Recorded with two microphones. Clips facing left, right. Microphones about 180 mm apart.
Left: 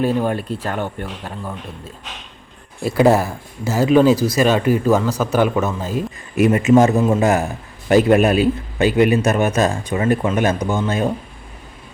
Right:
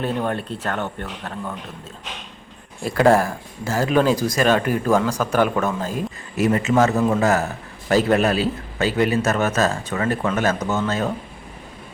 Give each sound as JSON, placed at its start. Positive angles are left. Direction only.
{"t": 0.0, "sound": "speech", "side_deg": 5}
{"t": 2.8, "sound": "speech", "side_deg": 10}